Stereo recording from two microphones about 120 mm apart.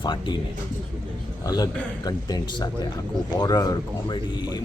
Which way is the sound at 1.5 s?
30° left (ahead or behind).